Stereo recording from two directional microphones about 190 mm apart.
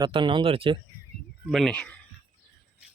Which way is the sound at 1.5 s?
Centre (ahead or behind).